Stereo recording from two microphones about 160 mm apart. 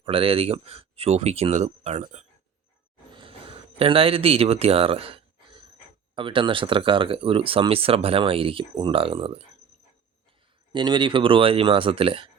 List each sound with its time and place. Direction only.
0.0 s speech: 35° right (ahead or behind)
3.2 s a sound: 35° right (ahead or behind)
6.1 s speech: 30° right (ahead or behind)
10.7 s speech: 30° right (ahead or behind)